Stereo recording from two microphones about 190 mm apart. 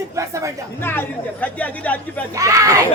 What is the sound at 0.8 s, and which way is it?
Speech, 10° left (ahead or behind).